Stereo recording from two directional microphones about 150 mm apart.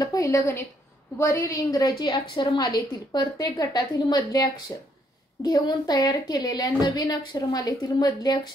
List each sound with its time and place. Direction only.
0.0 s a woman's voice: 25° left (ahead or behind)